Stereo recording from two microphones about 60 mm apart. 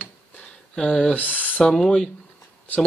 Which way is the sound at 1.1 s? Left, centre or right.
Left.